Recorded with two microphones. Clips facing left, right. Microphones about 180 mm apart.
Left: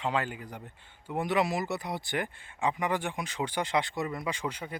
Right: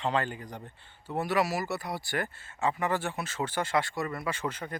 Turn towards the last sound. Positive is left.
turn(degrees=10)  # may be behind; listen again after turning